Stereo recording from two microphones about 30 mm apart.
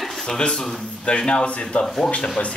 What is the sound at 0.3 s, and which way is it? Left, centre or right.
A man's voice, left.